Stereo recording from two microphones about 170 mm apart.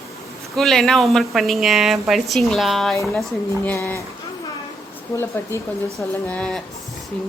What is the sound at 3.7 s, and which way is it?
Speech, 15° left (ahead or behind).